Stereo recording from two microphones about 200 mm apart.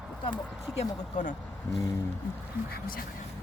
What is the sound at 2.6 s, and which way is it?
Speech, 50° left (ahead or behind).